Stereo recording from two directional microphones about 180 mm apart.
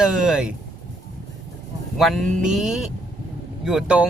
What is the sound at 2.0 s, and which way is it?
Speech, centre (ahead or behind).